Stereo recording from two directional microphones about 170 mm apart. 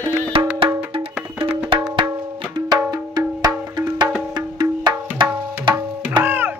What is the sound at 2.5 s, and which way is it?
Music, 25° right (ahead or behind).